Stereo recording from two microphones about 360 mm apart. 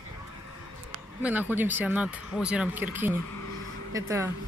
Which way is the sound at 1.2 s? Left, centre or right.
Centre.